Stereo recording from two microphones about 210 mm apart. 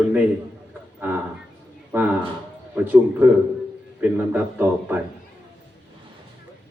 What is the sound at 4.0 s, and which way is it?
A man's voice, 10° right (ahead or behind).